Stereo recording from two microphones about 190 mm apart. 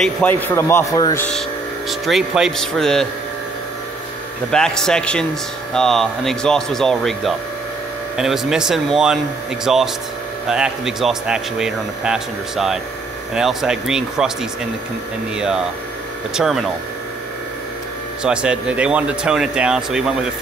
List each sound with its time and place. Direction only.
0.0 s a man's voice: 10° left (ahead or behind)
1.9 s speech: centre (ahead or behind)
4.5 s speech: 5° left (ahead or behind)
18.2 s speech: 5° right (ahead or behind)